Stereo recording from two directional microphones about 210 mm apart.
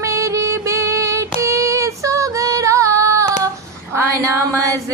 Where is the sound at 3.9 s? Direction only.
15° right (ahead or behind).